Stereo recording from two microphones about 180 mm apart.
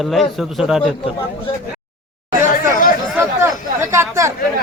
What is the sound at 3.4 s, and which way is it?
Chatter, 15° right (ahead or behind).